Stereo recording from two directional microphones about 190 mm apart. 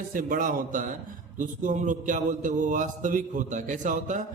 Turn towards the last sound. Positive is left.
turn(degrees=-40)  # may be behind; listen again after turning